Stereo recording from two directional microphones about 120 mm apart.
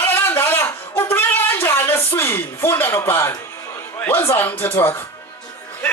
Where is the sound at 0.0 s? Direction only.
15° left (ahead or behind).